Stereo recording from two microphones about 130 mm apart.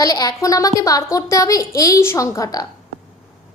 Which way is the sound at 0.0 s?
30° left (ahead or behind).